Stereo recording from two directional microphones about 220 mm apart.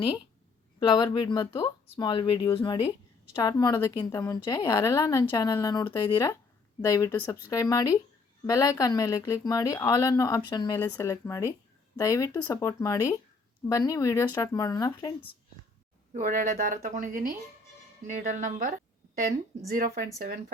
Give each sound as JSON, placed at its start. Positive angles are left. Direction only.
{"t": 0.8, "sound": "a woman's voice", "side_deg": 20}
{"t": 16.1, "sound": "speech", "side_deg": -35}
{"t": 20.1, "sound": "speech", "side_deg": -45}